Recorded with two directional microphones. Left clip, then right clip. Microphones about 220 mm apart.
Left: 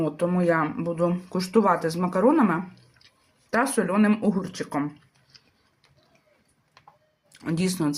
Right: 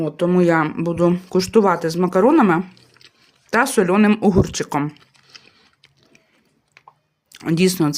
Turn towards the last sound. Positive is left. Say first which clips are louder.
# right 9 dB
turn(degrees=-35)  # may be behind; listen again after turning